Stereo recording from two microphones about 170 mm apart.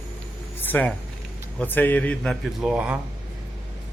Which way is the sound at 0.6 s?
10° left (ahead or behind).